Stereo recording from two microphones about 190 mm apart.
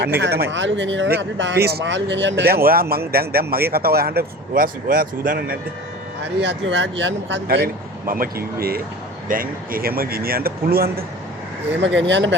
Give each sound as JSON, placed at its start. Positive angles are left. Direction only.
{"t": 0.0, "sound": "speech", "side_deg": -60}
{"t": 2.5, "sound": "speech", "side_deg": -50}
{"t": 6.4, "sound": "speech", "side_deg": -70}
{"t": 11.8, "sound": "speech", "side_deg": -70}